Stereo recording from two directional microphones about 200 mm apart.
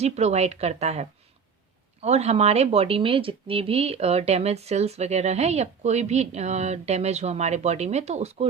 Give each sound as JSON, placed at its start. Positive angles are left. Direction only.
{"t": 0.0, "sound": "speech", "side_deg": -35}